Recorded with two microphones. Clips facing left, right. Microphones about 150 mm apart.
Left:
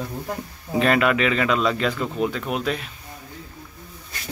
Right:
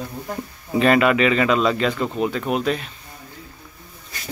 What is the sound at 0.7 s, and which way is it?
Speech, centre (ahead or behind).